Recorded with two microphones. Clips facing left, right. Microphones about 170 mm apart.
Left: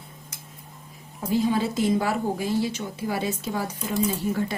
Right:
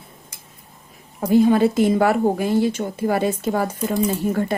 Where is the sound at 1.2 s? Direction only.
60° right (ahead or behind).